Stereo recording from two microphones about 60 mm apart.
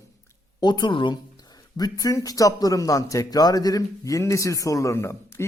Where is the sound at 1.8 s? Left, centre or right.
Left.